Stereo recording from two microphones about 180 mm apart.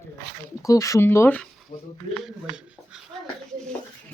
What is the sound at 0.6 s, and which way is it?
Speech, 15° left (ahead or behind).